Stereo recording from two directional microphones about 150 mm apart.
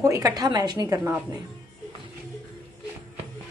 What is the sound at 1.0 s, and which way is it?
Speech, 10° right (ahead or behind).